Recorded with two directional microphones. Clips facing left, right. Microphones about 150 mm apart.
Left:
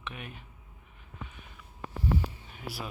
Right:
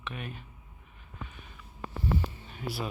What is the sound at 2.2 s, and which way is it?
Hum, 10° left (ahead or behind).